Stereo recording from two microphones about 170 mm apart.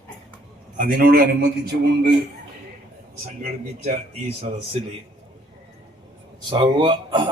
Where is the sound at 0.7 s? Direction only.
55° right (ahead or behind).